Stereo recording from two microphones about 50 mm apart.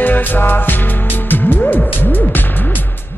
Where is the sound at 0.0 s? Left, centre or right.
Left.